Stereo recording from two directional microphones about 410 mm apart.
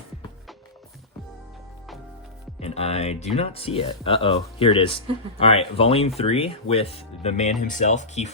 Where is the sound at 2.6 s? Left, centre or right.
Centre.